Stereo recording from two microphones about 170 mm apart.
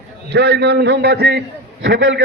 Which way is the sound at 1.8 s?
90° right.